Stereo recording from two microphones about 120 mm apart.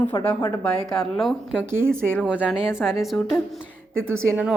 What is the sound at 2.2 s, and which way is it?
A woman's voice, 10° right (ahead or behind).